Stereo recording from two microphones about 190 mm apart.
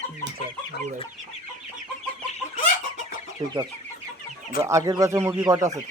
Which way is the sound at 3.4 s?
20° right (ahead or behind).